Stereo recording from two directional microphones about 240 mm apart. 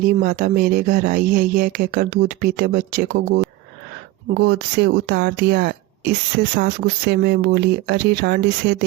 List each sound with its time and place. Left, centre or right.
0.0 s speech: right